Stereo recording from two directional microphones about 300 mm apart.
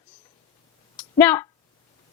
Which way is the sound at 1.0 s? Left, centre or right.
Centre.